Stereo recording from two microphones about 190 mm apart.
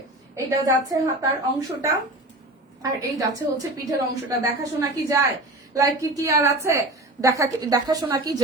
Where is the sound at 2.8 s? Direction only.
20° right (ahead or behind).